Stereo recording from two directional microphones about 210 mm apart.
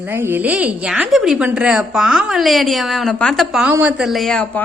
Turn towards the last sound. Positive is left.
turn(degrees=0)  # may be behind; listen again after turning